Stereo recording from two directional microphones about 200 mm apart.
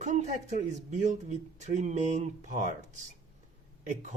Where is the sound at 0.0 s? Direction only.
35° right (ahead or behind).